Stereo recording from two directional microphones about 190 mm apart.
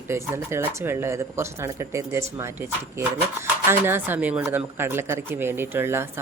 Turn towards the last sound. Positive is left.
turn(degrees=-10)  # may be behind; listen again after turning